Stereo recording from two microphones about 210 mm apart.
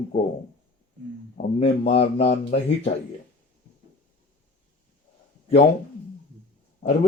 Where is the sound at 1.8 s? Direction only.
30° left (ahead or behind).